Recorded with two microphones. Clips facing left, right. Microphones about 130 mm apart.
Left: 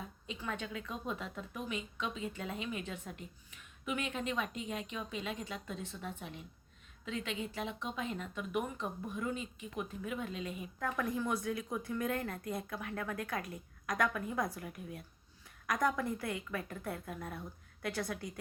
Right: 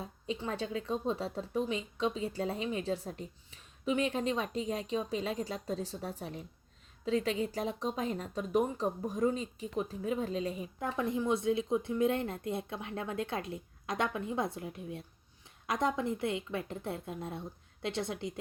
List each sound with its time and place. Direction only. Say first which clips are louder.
0.0 s speech: right 6 dB; 30° right (ahead or behind)